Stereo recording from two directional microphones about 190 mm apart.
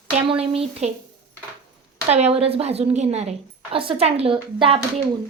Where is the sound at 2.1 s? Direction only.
35° right (ahead or behind).